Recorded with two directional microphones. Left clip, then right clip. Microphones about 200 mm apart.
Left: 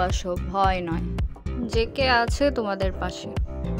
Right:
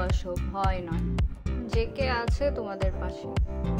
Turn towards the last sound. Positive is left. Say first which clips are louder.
# even
turn(degrees=0)  # may be behind; listen again after turning